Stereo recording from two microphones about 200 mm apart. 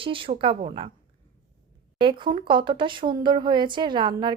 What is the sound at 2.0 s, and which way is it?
Speech, 25° right (ahead or behind).